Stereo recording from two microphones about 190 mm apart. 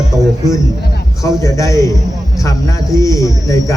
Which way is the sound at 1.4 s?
15° left (ahead or behind).